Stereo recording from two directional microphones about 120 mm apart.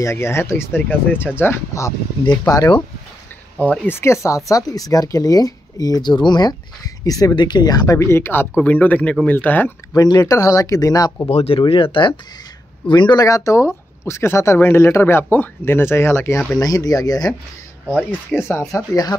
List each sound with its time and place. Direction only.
0.0 s speech: 20° left (ahead or behind)
3.5 s speech: 10° left (ahead or behind)
9.9 s speech: 30° left (ahead or behind)
11.2 s speech: 55° left (ahead or behind)
11.6 s speech: 45° left (ahead or behind); by 16.4 s 20° left (ahead or behind)
16.5 s speech: 30° left (ahead or behind)
17.8 s speech: 5° right (ahead or behind)